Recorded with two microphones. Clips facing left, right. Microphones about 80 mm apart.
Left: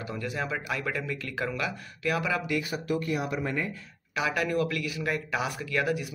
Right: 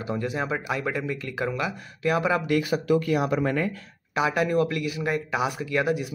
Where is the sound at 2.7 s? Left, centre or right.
Right.